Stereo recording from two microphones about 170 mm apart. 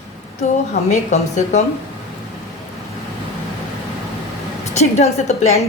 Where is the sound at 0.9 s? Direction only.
45° left (ahead or behind).